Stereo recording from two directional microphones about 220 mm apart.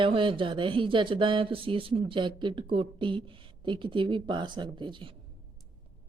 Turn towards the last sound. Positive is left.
turn(degrees=-20)  # may be behind; listen again after turning